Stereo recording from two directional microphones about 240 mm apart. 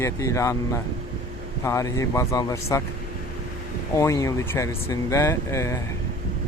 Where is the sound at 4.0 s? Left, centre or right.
Centre.